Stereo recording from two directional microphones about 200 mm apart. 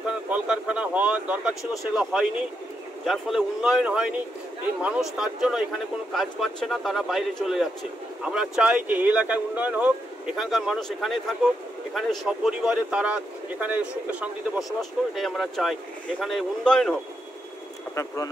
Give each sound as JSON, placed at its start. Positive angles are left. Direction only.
{"t": 0.3, "sound": "a sound", "side_deg": -5}
{"t": 1.7, "sound": "speech", "side_deg": 0}
{"t": 17.9, "sound": "speech", "side_deg": 15}